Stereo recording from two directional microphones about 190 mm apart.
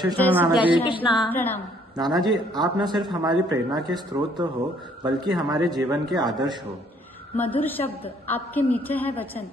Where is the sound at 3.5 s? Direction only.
20° right (ahead or behind).